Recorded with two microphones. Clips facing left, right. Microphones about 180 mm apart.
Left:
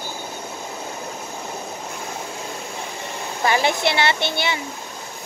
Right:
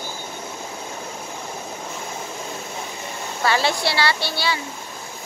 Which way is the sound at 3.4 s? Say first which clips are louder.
Left 1 dB; 15° left (ahead or behind).